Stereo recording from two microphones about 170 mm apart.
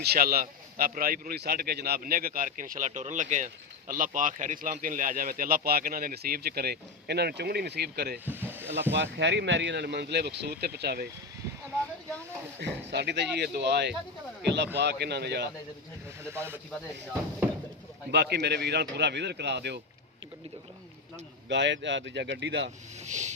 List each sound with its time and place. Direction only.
0.0 s a man's voice: 65° right (ahead or behind)
8.4 s a sound: 10° right (ahead or behind)
9.0 s speech: 90° right; by 11.1 s 70° right (ahead or behind)
12.5 s speech: 85° right
16.3 s speech: 15° right (ahead or behind)
18.1 s speech: 80° right
21.5 s speech: 90° right
23.0 s a sound: 45° right (ahead or behind)